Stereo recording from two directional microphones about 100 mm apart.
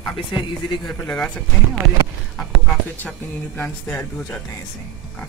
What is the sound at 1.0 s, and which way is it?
Speech, 10° left (ahead or behind).